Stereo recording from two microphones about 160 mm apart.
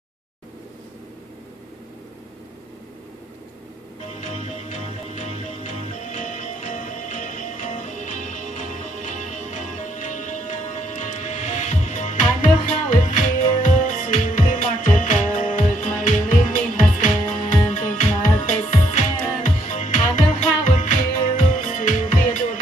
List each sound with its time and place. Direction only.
4.2 s music: 45° left (ahead or behind)